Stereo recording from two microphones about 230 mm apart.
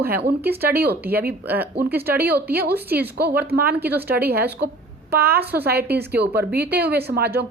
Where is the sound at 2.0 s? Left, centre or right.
Right.